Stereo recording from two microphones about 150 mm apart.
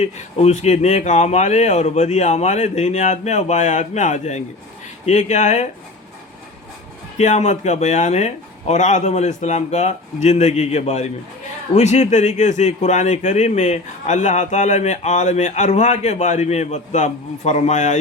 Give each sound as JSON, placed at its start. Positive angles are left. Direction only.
{"t": 0.0, "sound": "a man's voice", "side_deg": 45}
{"t": 7.2, "sound": "a man's voice", "side_deg": 50}